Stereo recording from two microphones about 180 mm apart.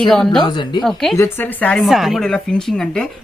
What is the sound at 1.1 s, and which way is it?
A woman's voice, 15° left (ahead or behind).